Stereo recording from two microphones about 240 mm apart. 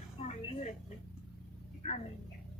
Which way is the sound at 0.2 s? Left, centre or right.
Left.